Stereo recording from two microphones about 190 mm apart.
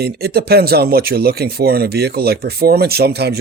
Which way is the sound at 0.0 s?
55° right (ahead or behind).